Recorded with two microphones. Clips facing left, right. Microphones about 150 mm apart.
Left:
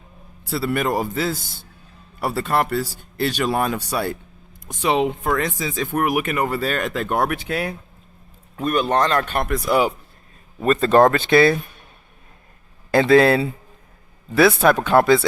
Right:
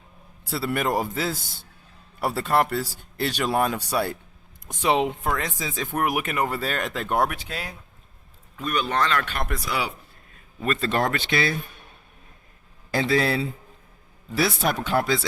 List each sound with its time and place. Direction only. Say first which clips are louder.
0.5 s speech: left 3 dB; 75° left (ahead or behind)
4.8 s speech: left 2 dB; 90° left; by 7.8 s 60° left (ahead or behind)
8.5 s speech: left 6 dB; 50° left (ahead or behind)
12.9 s speech: left 9 dB; 60° left (ahead or behind)